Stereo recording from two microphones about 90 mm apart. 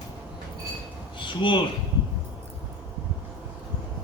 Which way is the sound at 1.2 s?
65° left (ahead or behind).